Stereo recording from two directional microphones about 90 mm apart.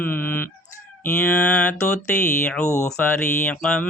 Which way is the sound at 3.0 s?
20° left (ahead or behind).